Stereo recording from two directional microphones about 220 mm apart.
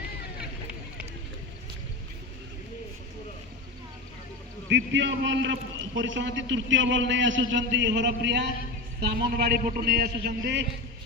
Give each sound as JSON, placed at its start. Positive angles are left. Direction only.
{"t": 4.7, "sound": "a man's voice", "side_deg": -55}